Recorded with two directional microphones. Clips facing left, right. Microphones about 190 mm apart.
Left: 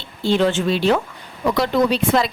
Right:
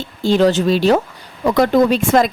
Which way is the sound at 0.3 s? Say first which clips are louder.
Right 4 dB; 40° right (ahead or behind).